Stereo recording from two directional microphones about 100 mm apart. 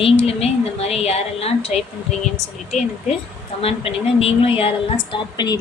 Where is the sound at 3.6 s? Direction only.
75° left (ahead or behind).